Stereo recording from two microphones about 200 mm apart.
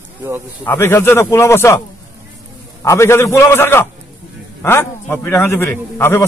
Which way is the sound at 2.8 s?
15° left (ahead or behind).